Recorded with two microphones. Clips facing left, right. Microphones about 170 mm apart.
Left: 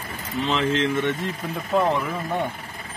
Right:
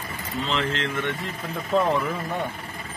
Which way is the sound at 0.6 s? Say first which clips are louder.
Left 7 dB; 15° left (ahead or behind).